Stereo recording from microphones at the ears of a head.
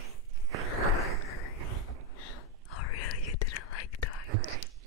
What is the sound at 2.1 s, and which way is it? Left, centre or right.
Whispering, left.